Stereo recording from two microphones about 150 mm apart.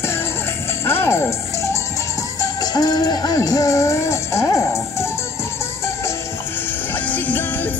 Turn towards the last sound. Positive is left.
turn(degrees=10)  # may be behind; listen again after turning